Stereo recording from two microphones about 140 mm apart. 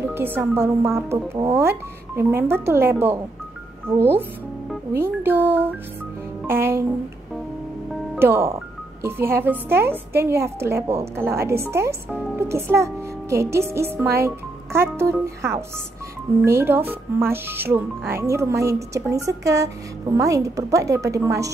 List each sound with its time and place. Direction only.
0.0 s speech: 15° right (ahead or behind)
8.2 s speech: 20° right (ahead or behind)